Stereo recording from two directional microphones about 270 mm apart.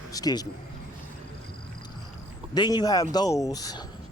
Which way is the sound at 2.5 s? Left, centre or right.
Centre.